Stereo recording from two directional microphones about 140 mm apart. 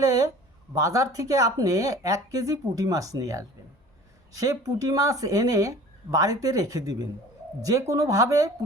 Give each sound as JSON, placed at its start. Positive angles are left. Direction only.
{"t": 0.0, "sound": "speech", "side_deg": -25}